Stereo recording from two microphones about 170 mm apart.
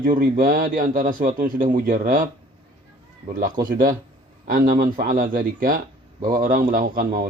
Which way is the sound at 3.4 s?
55° right (ahead or behind).